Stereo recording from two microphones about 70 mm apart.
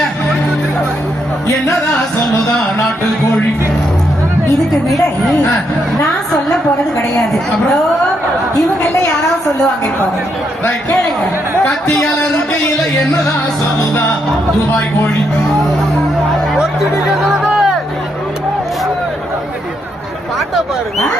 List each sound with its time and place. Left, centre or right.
1.5 s music: left
10.6 s a man's voice: left
11.7 s speech: centre
17.1 s music: centre